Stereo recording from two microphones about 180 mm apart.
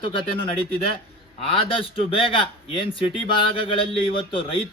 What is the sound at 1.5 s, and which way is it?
Speech, 30° left (ahead or behind).